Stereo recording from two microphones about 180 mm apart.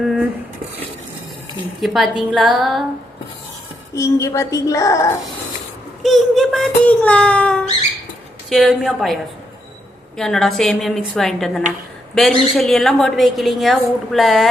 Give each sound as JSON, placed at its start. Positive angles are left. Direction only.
{"t": 0.0, "sound": "cutlery", "side_deg": 0}
{"t": 1.8, "sound": "a woman's voice", "side_deg": 0}
{"t": 3.9, "sound": "speech", "side_deg": 15}
{"t": 6.0, "sound": "a woman's voice", "side_deg": 0}
{"t": 10.2, "sound": "a woman's voice", "side_deg": 0}